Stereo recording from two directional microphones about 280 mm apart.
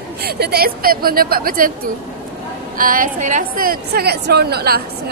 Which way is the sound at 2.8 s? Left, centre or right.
Right.